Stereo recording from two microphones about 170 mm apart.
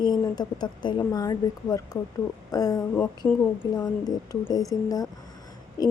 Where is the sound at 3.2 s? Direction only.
10° left (ahead or behind).